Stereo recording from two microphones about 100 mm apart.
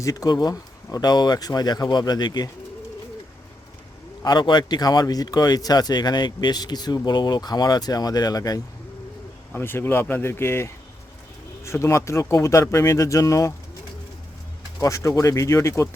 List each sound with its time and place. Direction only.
0.0 s speech: 35° left (ahead or behind)
4.2 s speech: 45° left (ahead or behind)
9.5 s speech: 20° left (ahead or behind)
14.8 s speech: 30° left (ahead or behind)